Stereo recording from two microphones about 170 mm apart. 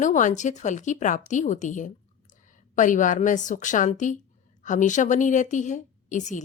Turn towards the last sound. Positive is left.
turn(degrees=45)  # may be behind; listen again after turning